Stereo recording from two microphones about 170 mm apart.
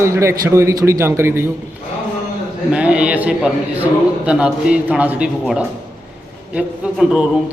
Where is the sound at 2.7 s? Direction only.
5° right (ahead or behind).